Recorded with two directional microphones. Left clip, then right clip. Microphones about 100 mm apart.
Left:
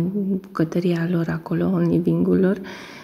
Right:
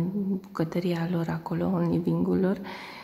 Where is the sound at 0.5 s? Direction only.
25° left (ahead or behind).